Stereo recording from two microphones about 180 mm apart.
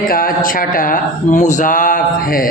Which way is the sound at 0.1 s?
55° left (ahead or behind).